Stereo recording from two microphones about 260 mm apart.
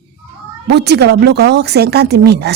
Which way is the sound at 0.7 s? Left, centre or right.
Right.